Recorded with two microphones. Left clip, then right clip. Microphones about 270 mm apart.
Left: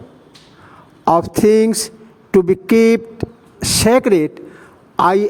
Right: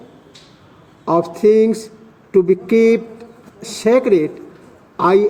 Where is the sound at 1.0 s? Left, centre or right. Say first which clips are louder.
Left 1 dB; left.